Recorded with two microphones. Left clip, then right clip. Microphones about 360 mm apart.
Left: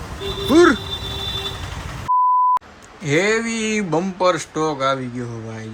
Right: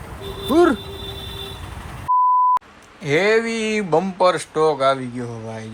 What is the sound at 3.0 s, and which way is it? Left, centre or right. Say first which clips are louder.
Speech: right 1 dB; centre.